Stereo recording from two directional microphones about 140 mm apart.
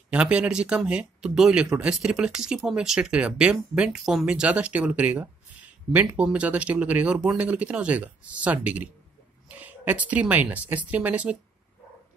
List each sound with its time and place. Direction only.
0.1 s speech: 10° right (ahead or behind)